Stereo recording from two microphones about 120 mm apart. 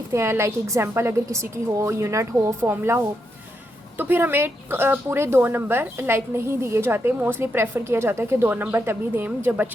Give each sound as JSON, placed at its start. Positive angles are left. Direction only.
{"t": 0.1, "sound": "speech", "side_deg": -20}